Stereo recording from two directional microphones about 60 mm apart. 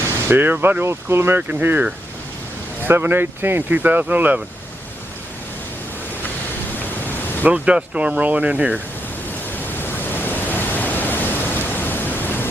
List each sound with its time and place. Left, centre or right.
0.3 s speech: right
1.4 s speech: right
2.8 s speech: right
7.5 s speech: centre
9.7 s pink noise: left